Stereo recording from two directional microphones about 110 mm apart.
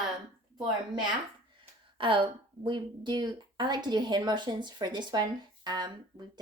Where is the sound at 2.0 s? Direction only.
50° right (ahead or behind).